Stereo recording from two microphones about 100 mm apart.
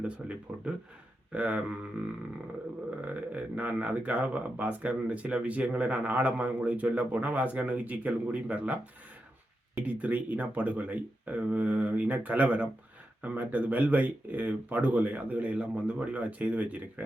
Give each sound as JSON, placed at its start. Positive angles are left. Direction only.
{"t": 0.0, "sound": "speech", "side_deg": -10}
{"t": 3.0, "sound": "speech", "side_deg": -15}